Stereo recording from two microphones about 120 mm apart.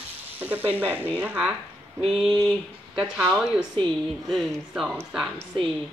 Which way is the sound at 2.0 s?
Centre (ahead or behind).